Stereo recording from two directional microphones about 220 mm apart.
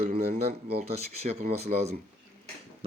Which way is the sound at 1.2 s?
30° right (ahead or behind).